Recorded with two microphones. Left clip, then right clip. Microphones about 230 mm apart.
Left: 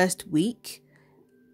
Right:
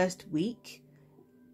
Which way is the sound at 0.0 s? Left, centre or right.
Left.